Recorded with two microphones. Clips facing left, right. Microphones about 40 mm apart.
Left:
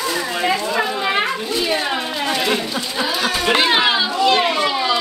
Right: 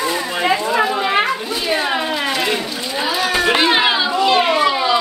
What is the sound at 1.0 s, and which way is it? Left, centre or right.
Children playing, centre.